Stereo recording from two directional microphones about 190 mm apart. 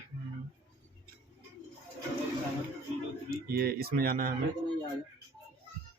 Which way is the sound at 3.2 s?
55° right (ahead or behind).